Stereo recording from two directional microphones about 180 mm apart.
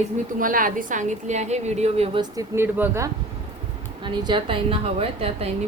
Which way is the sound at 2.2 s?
20° right (ahead or behind).